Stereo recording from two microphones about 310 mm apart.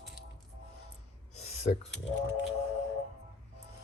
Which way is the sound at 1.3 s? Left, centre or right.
Left.